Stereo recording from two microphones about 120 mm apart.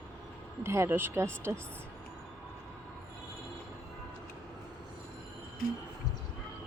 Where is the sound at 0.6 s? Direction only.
20° right (ahead or behind).